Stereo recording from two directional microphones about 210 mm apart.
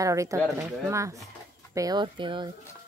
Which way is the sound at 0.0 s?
15° right (ahead or behind).